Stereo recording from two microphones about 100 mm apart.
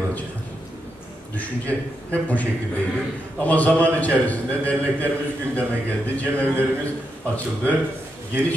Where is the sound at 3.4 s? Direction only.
15° left (ahead or behind).